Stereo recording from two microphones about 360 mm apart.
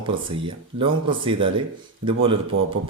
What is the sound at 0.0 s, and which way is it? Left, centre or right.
Speech, centre.